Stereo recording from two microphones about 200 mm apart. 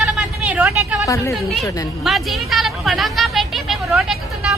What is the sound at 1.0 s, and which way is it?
Speech, 15° left (ahead or behind).